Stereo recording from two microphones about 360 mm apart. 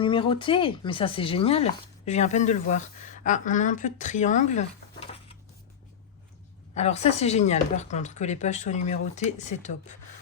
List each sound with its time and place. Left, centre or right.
0.0 s speech: centre
6.7 s speech: centre